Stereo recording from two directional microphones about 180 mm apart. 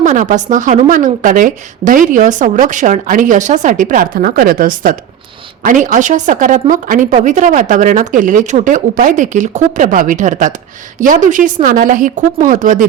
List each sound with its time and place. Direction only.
0.0 s a woman's voice: 45° right (ahead or behind)